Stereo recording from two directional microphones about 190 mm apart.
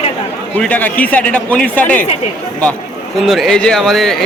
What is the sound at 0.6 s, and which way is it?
A man's voice, 10° left (ahead or behind).